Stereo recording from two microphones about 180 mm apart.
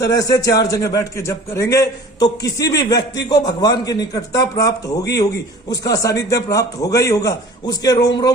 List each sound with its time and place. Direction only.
0.0 s a man's voice: 20° left (ahead or behind)